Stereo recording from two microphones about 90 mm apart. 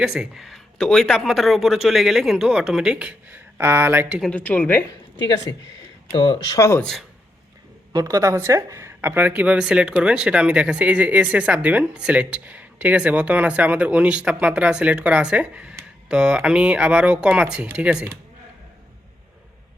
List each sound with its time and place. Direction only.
0.0 s speech: 5° right (ahead or behind); by 4.1 s 25° right (ahead or behind)
4.3 s a woman's voice: 15° left (ahead or behind)
5.5 s speech: 40° left (ahead or behind)
6.1 s speech: 65° left (ahead or behind)
6.6 s speech: 30° left (ahead or behind)
7.9 s a woman's voice: 40° right (ahead or behind); by 17.9 s 10° right (ahead or behind)